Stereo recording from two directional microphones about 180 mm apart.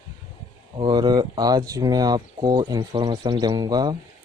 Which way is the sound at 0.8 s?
25° right (ahead or behind).